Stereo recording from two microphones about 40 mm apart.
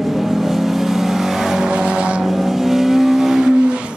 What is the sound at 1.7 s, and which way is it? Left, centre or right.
Vehicle, right.